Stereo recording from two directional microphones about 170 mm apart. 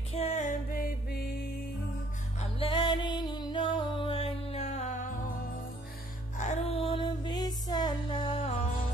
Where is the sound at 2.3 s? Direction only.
30° left (ahead or behind).